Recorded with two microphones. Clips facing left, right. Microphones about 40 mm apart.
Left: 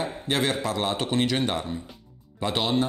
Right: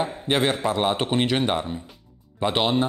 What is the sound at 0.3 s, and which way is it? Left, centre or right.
A man's voice, right.